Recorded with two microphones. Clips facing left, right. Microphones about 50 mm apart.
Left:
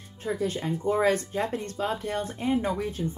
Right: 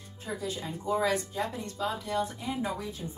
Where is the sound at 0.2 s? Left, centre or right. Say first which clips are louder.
Left 6 dB; left.